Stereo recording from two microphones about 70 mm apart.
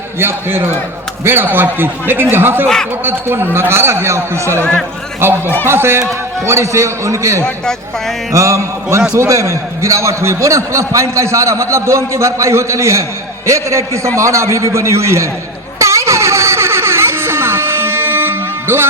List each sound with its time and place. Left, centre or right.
0.2 s a man's voice: right
7.4 s a man's voice: centre
8.3 s a man's voice: right
15.8 s a sound: right